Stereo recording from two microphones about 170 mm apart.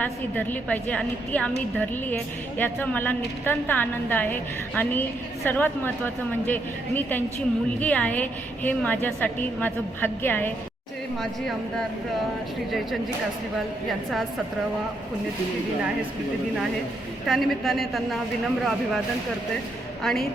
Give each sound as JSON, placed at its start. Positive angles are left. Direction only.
{"t": 0.0, "sound": "a woman's voice", "side_deg": 10}
{"t": 17.2, "sound": "a woman's voice", "side_deg": 0}